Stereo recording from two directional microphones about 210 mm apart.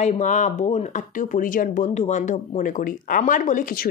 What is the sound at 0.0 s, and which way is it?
A woman's voice, 35° left (ahead or behind).